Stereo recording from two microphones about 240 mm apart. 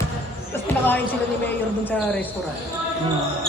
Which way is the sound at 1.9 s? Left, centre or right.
Centre.